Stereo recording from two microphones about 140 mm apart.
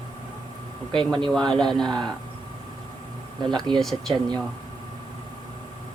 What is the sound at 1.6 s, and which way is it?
Speech, centre (ahead or behind).